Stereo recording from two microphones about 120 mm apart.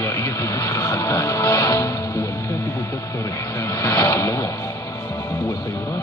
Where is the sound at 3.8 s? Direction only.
30° left (ahead or behind).